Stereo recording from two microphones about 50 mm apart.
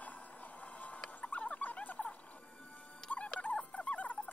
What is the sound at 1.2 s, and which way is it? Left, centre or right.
Rodents, left.